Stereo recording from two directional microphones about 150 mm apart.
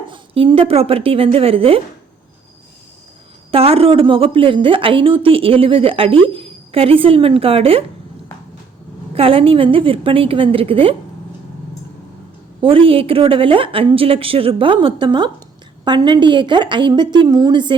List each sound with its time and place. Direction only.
0.1 s a woman's voice: 35° right (ahead or behind)
3.5 s a woman's voice: 40° right (ahead or behind)
9.1 s a woman's voice: 40° right (ahead or behind)
12.6 s a woman's voice: 35° right (ahead or behind)